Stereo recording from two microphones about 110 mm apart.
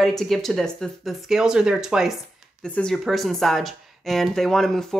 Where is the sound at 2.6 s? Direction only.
10° left (ahead or behind).